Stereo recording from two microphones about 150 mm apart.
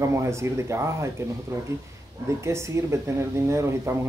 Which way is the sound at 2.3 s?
20° right (ahead or behind).